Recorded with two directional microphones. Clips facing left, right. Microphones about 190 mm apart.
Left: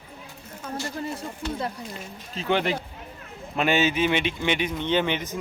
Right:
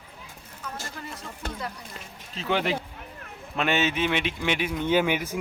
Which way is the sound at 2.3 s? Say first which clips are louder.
Left 2 dB; centre (ahead or behind).